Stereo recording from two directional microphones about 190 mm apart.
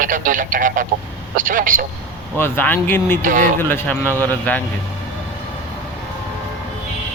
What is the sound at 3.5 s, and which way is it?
Speech, 10° left (ahead or behind).